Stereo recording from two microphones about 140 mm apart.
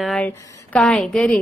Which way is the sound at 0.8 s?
5° left (ahead or behind).